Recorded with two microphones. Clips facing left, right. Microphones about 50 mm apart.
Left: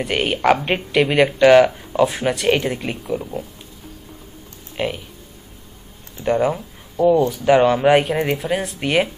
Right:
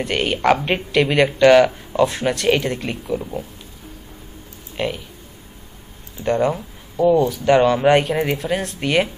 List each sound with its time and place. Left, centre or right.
0.0 s speech: centre
4.7 s speech: centre
6.2 s speech: centre